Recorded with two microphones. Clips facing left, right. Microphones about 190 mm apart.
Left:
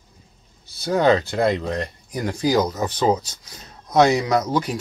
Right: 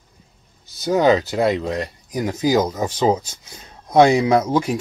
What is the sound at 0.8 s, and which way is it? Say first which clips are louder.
Speech: right 2 dB; 15° right (ahead or behind).